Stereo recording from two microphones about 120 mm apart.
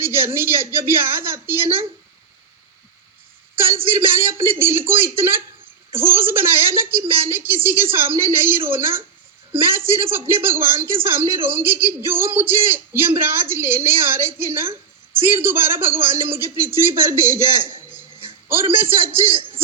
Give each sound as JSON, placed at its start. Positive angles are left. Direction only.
{"t": 0.0, "sound": "a woman's voice", "side_deg": -20}
{"t": 3.6, "sound": "a man's voice", "side_deg": -20}